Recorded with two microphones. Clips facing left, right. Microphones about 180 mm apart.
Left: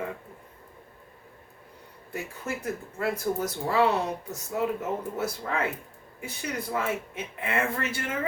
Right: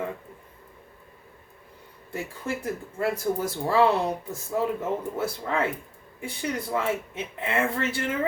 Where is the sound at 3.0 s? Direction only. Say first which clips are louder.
Right 2 dB; 30° right (ahead or behind).